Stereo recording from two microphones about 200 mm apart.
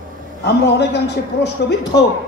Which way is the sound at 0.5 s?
55° left (ahead or behind).